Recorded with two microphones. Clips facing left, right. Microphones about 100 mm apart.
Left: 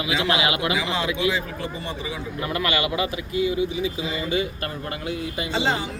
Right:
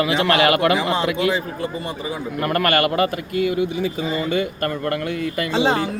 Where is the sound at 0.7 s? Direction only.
45° right (ahead or behind).